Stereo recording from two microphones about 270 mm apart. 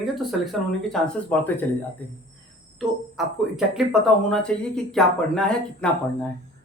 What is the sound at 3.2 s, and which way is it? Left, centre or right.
Speech, centre.